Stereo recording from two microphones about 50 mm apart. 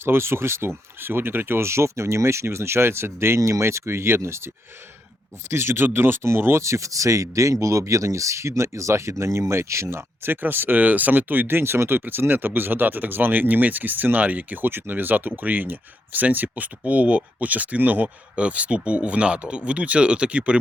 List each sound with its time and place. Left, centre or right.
0.0 s speech: right
0.9 s speech: right
5.5 s speech: right
6.2 s speech: right
10.2 s speech: right
18.3 s speech: right